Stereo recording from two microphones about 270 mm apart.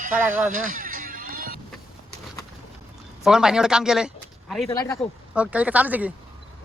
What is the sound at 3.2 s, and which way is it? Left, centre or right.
Speech, centre.